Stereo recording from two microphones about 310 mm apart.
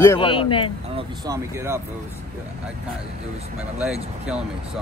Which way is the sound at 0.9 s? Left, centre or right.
Centre.